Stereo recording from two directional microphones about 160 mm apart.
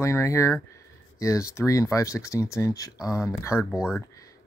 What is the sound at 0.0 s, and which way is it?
Speech, 15° left (ahead or behind).